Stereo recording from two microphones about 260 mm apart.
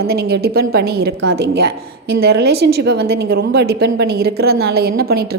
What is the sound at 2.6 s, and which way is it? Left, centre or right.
Speech, right.